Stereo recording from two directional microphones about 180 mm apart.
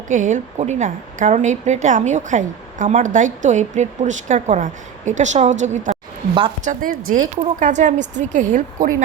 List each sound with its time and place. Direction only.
0.1 s a woman's voice: 45° right (ahead or behind)